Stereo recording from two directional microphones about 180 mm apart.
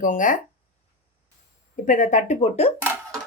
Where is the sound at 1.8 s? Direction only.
45° left (ahead or behind).